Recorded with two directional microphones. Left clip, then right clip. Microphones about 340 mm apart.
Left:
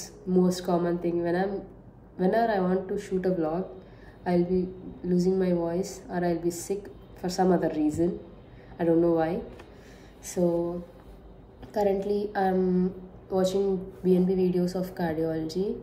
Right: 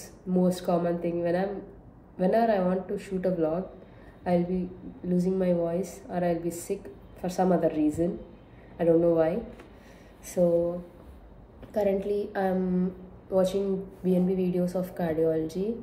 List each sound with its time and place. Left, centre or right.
0.0 s a woman's voice: centre
11.7 s a woman's voice: centre